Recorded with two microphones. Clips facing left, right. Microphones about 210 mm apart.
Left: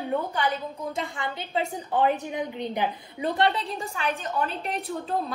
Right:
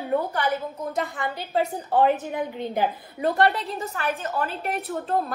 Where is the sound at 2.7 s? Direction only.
45° right (ahead or behind).